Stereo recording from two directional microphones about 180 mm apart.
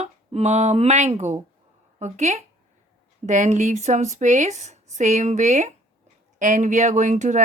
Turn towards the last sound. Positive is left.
turn(degrees=-40)  # may be behind; listen again after turning